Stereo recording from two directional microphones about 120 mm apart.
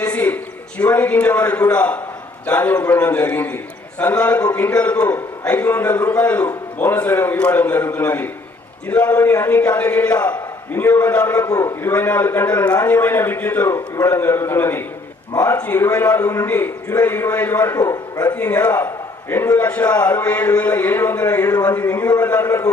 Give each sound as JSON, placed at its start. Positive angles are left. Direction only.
{"t": 0.0, "sound": "a sound", "side_deg": 10}
{"t": 0.8, "sound": "a man's voice", "side_deg": 10}
{"t": 11.4, "sound": "a man's voice", "side_deg": 30}
{"t": 11.8, "sound": "a man's voice", "side_deg": 15}
{"t": 17.7, "sound": "a man's voice", "side_deg": 30}
{"t": 18.3, "sound": "a man's voice", "side_deg": 15}
{"t": 22.4, "sound": "a man's voice", "side_deg": 30}